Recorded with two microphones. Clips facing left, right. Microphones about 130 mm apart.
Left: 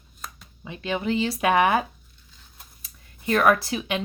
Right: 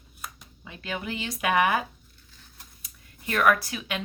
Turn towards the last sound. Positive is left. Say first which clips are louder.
# left 5 dB
turn(degrees=25)  # may be behind; listen again after turning